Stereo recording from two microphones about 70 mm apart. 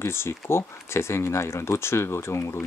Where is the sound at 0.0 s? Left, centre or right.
Left.